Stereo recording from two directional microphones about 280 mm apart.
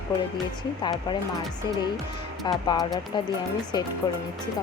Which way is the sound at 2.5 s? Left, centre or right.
Centre.